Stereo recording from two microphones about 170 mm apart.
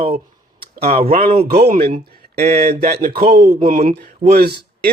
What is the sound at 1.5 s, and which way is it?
Speech, 65° right (ahead or behind).